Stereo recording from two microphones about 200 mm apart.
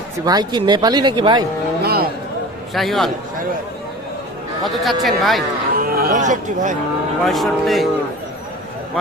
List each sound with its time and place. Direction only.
0.3 s speech: 20° right (ahead or behind)
1.8 s a sound: 50° right (ahead or behind)
2.7 s speech: centre (ahead or behind)
4.6 s speech: centre (ahead or behind)
5.7 s speech: 50° right (ahead or behind)
7.3 s speech: centre (ahead or behind)